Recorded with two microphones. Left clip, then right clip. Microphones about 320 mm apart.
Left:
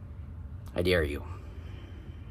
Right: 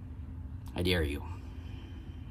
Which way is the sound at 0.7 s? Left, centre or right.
Centre.